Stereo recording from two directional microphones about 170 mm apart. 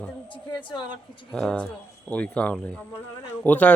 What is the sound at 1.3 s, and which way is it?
Speech, 5° left (ahead or behind).